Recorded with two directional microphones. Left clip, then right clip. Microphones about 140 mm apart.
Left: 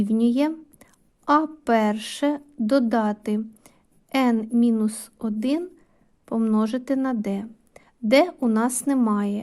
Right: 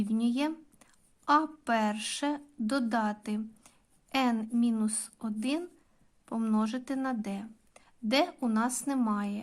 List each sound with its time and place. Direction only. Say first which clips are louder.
0.0 s a woman's voice: left 9 dB; 30° left (ahead or behind)
4.7 s speech: left 8 dB; 25° left (ahead or behind)